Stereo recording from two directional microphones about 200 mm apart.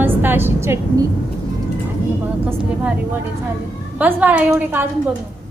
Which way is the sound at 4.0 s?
10° right (ahead or behind).